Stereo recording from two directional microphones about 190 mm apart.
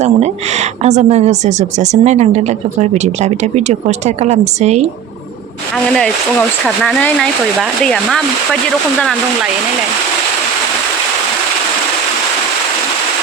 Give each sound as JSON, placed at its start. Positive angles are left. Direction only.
{"t": 0.0, "sound": "speech", "side_deg": -35}
{"t": 6.7, "sound": "speech", "side_deg": 0}